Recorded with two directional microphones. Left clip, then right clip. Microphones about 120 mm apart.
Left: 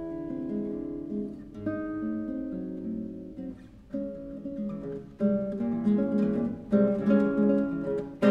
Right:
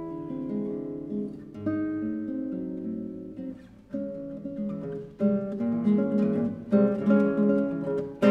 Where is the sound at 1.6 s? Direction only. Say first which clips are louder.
Right 3 dB; 20° right (ahead or behind).